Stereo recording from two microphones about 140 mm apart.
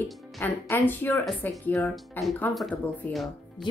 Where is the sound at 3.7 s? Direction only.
35° left (ahead or behind).